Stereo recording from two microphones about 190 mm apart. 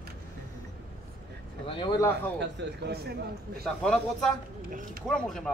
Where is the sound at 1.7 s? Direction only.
25° left (ahead or behind).